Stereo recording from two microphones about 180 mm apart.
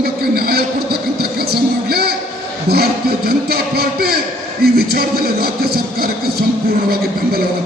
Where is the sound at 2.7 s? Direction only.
60° right (ahead or behind).